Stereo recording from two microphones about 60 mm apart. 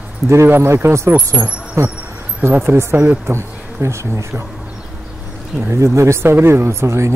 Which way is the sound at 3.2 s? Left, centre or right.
Right.